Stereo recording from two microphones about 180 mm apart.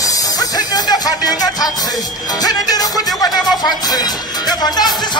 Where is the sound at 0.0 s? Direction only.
20° left (ahead or behind).